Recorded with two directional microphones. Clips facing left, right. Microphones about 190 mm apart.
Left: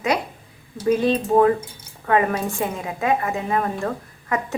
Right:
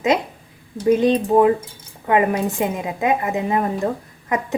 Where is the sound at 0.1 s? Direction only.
20° right (ahead or behind).